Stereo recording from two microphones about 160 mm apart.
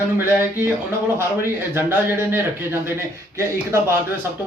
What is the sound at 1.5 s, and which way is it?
Speech, 15° right (ahead or behind).